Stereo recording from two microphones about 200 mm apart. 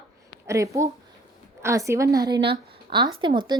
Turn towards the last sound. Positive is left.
turn(degrees=-25)  # may be behind; listen again after turning